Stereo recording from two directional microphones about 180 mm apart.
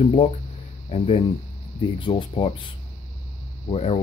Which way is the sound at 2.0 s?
30° left (ahead or behind).